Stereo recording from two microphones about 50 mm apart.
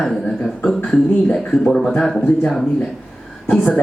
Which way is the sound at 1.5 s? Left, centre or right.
Centre.